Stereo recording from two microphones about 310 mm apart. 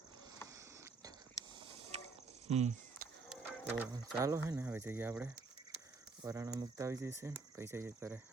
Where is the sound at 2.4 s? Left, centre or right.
Right.